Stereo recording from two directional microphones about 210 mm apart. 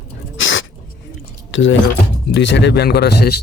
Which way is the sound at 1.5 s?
65° left (ahead or behind).